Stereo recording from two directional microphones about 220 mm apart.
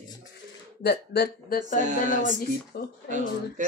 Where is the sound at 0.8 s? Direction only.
50° left (ahead or behind).